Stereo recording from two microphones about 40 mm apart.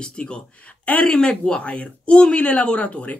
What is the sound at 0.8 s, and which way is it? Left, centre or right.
Speech, left.